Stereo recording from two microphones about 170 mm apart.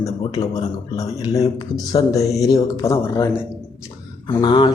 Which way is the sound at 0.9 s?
20° left (ahead or behind).